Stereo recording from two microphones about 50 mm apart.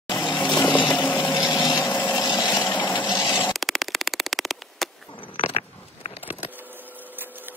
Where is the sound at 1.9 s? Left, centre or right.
Left.